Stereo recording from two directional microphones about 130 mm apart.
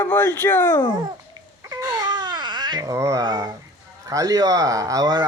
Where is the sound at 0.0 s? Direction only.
15° left (ahead or behind).